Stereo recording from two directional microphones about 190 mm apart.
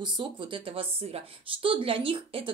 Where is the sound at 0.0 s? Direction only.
25° right (ahead or behind).